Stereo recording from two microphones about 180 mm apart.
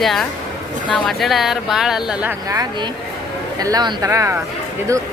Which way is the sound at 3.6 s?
20° right (ahead or behind).